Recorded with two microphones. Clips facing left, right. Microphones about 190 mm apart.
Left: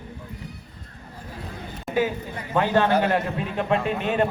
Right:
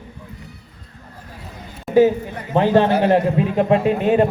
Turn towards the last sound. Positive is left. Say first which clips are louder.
# right 7 dB
turn(degrees=-30)  # may be behind; listen again after turning